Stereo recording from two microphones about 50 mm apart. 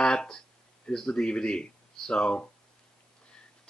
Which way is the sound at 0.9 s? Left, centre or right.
Centre.